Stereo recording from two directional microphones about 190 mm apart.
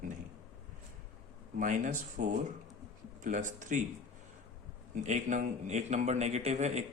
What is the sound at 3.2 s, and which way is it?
Speech, 40° right (ahead or behind).